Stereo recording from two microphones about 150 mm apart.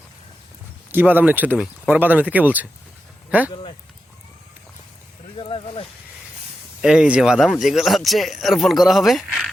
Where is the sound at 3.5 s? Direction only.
35° left (ahead or behind).